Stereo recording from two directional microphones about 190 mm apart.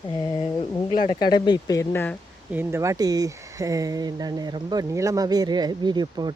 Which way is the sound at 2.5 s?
15° right (ahead or behind).